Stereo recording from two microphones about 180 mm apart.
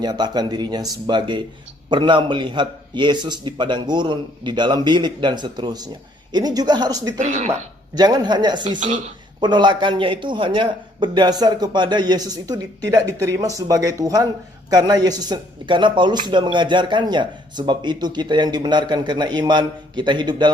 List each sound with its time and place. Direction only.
0.0 s speech: 25° right (ahead or behind)
7.2 s speech: 40° right (ahead or behind)
7.9 s speech: 20° right (ahead or behind)